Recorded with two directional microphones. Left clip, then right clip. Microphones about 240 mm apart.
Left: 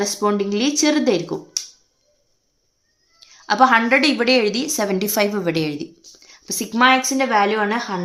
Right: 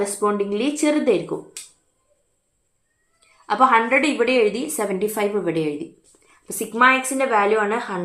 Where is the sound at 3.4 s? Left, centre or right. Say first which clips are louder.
Left 2 dB; left.